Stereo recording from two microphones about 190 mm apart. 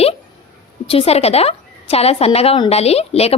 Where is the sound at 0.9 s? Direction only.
30° left (ahead or behind).